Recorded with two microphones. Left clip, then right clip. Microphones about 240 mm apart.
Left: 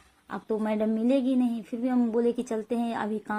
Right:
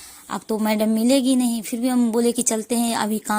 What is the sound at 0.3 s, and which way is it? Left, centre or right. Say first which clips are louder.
A woman's voice: right 6 dB; right.